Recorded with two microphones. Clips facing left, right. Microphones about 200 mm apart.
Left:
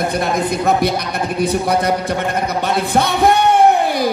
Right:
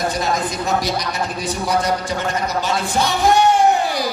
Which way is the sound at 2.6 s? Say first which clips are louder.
Left 6 dB; 60° left (ahead or behind).